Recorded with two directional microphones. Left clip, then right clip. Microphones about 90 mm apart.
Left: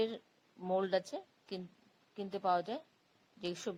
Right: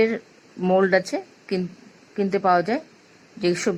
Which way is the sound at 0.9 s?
45° left (ahead or behind).